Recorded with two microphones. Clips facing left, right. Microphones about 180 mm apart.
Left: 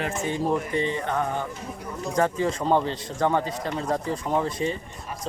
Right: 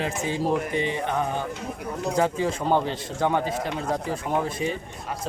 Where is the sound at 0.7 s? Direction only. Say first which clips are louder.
Even; 75° right (ahead or behind).